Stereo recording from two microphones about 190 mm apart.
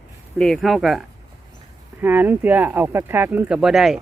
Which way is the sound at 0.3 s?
Centre (ahead or behind).